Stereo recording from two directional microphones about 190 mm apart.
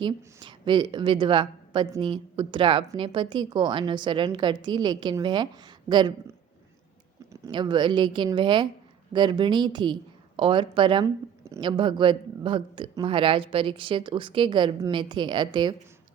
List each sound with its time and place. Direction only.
0.0 s a woman's voice: 25° right (ahead or behind)
7.4 s speech: 25° right (ahead or behind)